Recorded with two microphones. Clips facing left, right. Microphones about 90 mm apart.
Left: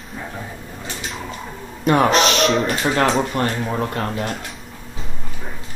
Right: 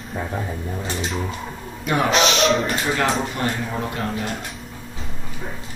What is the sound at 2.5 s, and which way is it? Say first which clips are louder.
Speech: left 2 dB; centre (ahead or behind).